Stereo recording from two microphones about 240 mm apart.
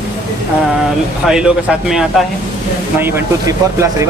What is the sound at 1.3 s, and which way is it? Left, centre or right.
Speech, centre.